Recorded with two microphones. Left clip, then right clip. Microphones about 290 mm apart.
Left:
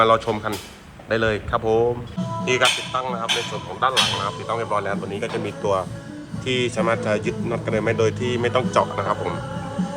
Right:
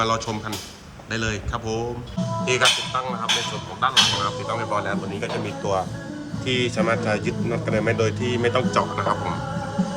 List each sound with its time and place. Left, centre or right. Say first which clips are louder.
0.0 s speech: left 6 dB; centre